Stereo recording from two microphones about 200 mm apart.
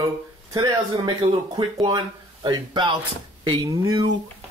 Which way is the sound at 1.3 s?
25° right (ahead or behind).